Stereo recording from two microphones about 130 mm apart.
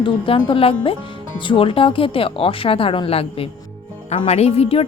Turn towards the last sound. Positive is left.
turn(degrees=50)  # may be behind; listen again after turning